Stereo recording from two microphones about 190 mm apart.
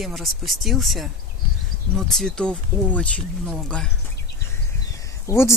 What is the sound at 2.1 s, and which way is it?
Speech, 5° left (ahead or behind).